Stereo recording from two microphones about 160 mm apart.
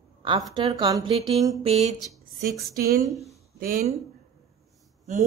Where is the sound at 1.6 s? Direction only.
45° right (ahead or behind).